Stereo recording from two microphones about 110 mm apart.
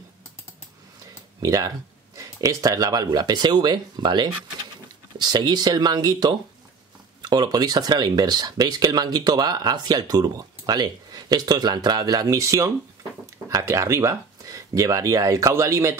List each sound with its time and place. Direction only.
1.4 s speech: 30° right (ahead or behind)